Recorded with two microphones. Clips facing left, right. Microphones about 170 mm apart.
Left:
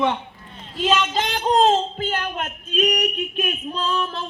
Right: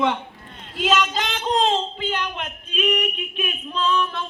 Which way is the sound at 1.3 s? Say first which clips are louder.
Left 5 dB; 40° left (ahead or behind).